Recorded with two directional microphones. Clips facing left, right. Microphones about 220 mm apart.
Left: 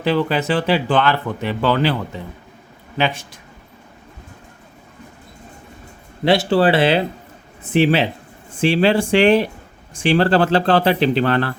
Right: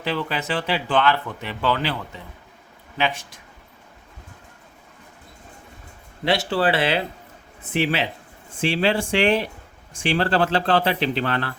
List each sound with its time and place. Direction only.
0.0 s speech: 35° left (ahead or behind)
6.2 s speech: 30° left (ahead or behind)